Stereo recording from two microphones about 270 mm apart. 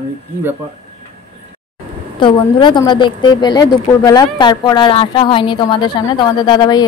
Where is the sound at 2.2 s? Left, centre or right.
Centre.